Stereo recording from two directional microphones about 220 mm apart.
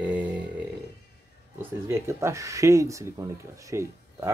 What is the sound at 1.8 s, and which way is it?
Speech, 10° right (ahead or behind).